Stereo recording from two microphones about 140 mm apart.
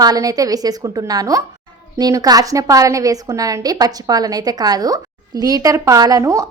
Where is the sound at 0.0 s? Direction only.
25° right (ahead or behind).